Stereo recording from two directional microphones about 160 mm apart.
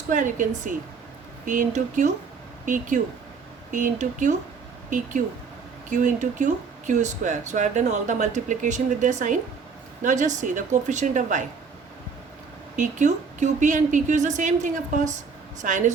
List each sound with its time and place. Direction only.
0.1 s speech: 55° right (ahead or behind)
5.9 s speech: 50° right (ahead or behind)
12.7 s speech: 50° right (ahead or behind)